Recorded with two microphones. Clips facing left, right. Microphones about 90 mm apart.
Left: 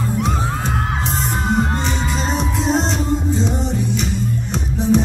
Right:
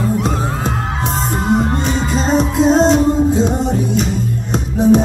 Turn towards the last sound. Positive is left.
turn(degrees=-45)  # may be behind; listen again after turning